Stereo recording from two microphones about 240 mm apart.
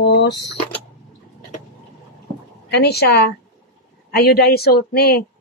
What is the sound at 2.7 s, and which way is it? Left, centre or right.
Speech, left.